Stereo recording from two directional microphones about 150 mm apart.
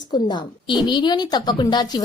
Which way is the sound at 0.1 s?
30° left (ahead or behind).